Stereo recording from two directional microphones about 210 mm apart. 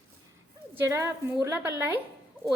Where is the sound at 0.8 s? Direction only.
15° right (ahead or behind).